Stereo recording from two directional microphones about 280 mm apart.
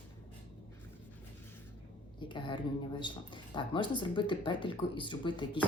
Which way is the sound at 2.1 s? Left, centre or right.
Centre.